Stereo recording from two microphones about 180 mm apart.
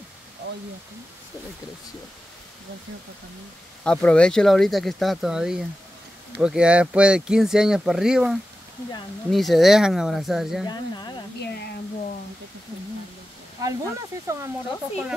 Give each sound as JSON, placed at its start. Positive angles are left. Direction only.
{"t": 3.8, "sound": "speech", "side_deg": 5}
{"t": 10.7, "sound": "speech", "side_deg": 20}
{"t": 11.4, "sound": "speech", "side_deg": 65}
{"t": 13.6, "sound": "speech", "side_deg": -20}